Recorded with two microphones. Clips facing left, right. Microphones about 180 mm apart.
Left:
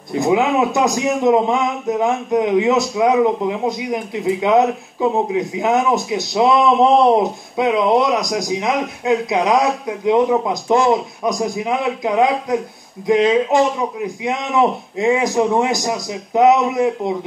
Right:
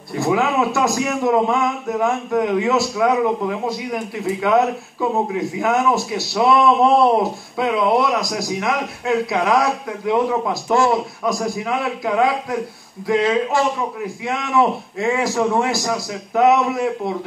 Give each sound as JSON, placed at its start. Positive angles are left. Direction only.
{"t": 0.2, "sound": "speech", "side_deg": 20}